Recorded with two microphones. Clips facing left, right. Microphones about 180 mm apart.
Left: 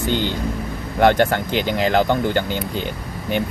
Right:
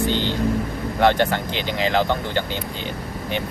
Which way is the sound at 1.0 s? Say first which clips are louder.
Left 3 dB; 50° left (ahead or behind).